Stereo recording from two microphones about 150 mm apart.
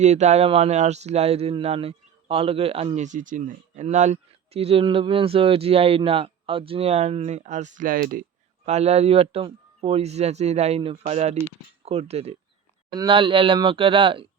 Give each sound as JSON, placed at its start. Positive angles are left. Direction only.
{"t": 0.0, "sound": "speech", "side_deg": -50}
{"t": 8.6, "sound": "speech", "side_deg": -45}
{"t": 12.9, "sound": "speech", "side_deg": -30}